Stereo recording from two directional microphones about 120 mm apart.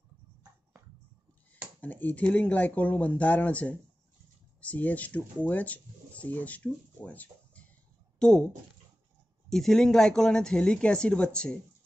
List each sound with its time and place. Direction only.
1.8 s speech: 15° left (ahead or behind)
9.5 s speech: 5° left (ahead or behind)